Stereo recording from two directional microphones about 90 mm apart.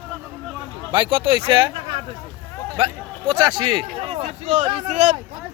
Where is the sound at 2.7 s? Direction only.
80° right.